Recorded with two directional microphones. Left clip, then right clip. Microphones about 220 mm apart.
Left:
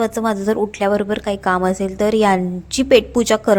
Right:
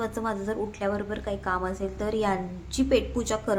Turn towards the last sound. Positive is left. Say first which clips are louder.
# left 13 dB
turn(degrees=35)  # may be behind; listen again after turning